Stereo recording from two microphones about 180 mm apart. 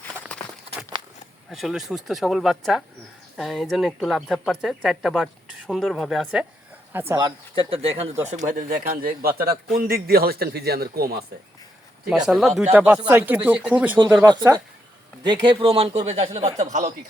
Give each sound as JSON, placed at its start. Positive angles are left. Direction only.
{"t": 0.3, "sound": "walk", "side_deg": 5}
{"t": 0.9, "sound": "a sound", "side_deg": -25}
{"t": 1.5, "sound": "speech", "side_deg": 0}
{"t": 6.9, "sound": "speech", "side_deg": -10}
{"t": 7.2, "sound": "a man's voice", "side_deg": -25}
{"t": 12.0, "sound": "speech", "side_deg": -5}
{"t": 15.2, "sound": "speech", "side_deg": -25}